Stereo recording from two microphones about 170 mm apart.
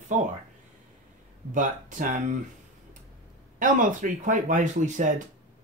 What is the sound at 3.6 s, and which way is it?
Speech, 50° right (ahead or behind).